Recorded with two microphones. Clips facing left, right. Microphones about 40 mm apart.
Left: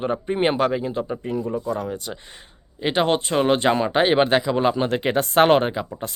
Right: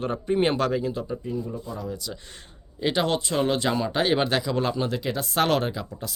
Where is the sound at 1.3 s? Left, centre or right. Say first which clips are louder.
Left 6 dB; left.